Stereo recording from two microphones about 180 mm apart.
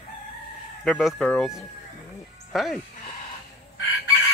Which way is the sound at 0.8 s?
5° left (ahead or behind).